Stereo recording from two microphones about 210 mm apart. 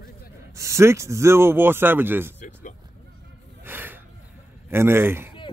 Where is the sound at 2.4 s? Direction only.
35° left (ahead or behind).